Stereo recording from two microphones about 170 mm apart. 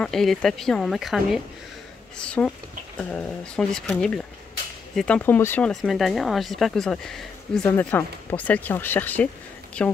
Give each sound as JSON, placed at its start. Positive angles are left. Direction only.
{"t": 0.0, "sound": "speech", "side_deg": 0}